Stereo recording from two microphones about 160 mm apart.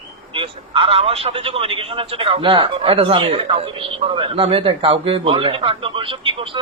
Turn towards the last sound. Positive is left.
turn(degrees=-35)  # may be behind; listen again after turning